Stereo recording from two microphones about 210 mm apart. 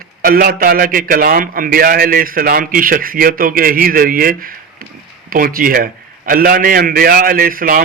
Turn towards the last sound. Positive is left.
turn(degrees=-40)  # may be behind; listen again after turning